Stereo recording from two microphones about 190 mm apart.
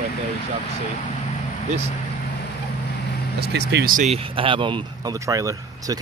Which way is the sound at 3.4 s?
60° right (ahead or behind).